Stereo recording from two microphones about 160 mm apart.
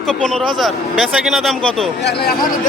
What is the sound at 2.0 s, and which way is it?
Speech, 90° left.